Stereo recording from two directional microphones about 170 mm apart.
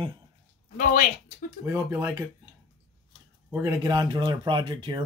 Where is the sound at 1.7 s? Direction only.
20° right (ahead or behind).